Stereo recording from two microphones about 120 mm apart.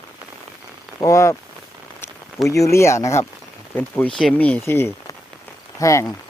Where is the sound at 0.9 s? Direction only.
25° left (ahead or behind).